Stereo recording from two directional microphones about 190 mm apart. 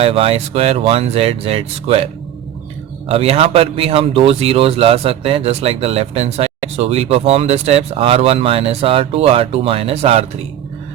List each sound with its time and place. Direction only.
0.0 s speech: 30° right (ahead or behind)
3.1 s speech: 30° right (ahead or behind)